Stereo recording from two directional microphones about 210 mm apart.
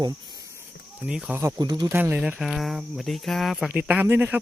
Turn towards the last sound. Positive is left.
turn(degrees=-10)  # may be behind; listen again after turning